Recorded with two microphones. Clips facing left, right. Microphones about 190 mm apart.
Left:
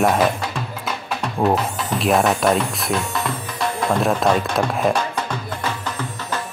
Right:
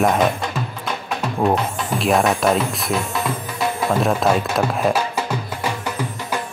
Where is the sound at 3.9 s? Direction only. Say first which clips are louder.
Even; 5° right (ahead or behind).